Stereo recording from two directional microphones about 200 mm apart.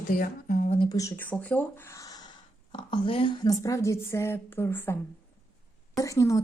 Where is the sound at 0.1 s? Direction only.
45° left (ahead or behind).